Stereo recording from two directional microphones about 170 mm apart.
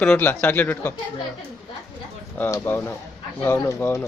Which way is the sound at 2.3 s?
15° left (ahead or behind).